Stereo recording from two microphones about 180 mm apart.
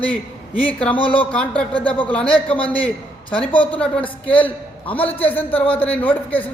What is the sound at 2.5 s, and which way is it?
Speech, 30° left (ahead or behind).